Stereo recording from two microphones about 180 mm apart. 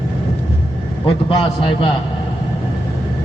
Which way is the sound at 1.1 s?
30° left (ahead or behind).